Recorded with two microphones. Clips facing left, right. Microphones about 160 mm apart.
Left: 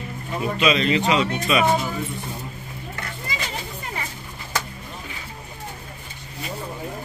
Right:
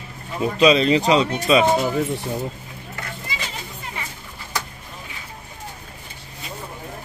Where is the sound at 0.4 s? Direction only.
35° right (ahead or behind).